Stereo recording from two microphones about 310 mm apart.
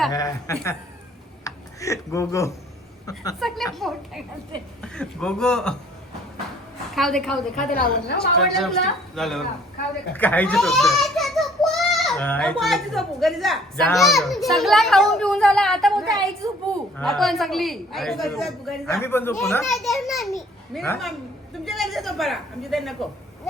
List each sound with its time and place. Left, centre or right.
0.1 s a woman's voice: centre
6.9 s a child's voice: centre
7.5 s a woman's voice: left
8.4 s a child's voice: centre
16.4 s a woman's voice: centre
17.0 s a child's voice: centre